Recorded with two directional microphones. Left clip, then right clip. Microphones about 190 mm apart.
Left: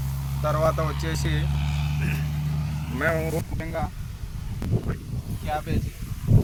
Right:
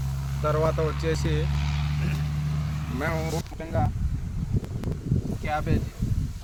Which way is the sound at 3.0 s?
65° right (ahead or behind).